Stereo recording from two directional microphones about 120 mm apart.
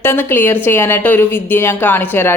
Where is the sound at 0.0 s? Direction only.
20° left (ahead or behind).